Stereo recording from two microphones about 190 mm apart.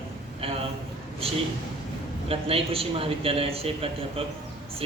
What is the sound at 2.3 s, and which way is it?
A man's voice, 30° right (ahead or behind).